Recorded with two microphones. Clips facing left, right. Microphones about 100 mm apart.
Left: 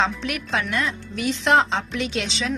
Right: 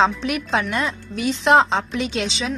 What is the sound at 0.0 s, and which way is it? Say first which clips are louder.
Speech: right 5 dB; 25° right (ahead or behind).